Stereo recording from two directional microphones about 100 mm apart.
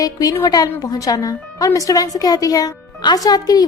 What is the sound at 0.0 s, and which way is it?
A woman's voice, 35° left (ahead or behind).